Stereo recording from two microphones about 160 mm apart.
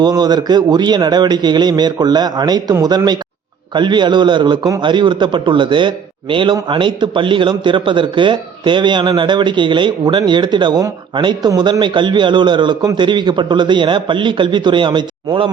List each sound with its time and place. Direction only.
0.0 s a man's voice: 25° right (ahead or behind)